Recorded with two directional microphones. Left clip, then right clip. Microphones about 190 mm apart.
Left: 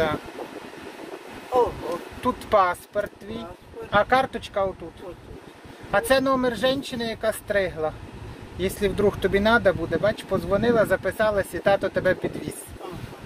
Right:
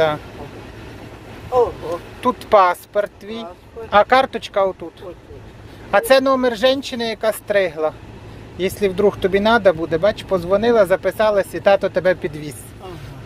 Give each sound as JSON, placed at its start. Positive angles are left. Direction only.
{"t": 2.2, "sound": "speech", "side_deg": -30}
{"t": 5.9, "sound": "speech", "side_deg": -30}